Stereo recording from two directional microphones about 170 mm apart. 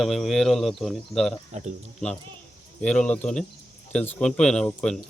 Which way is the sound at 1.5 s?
40° right (ahead or behind).